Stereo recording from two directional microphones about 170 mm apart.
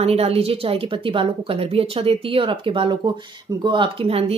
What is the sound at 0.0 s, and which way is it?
Speech, 35° right (ahead or behind).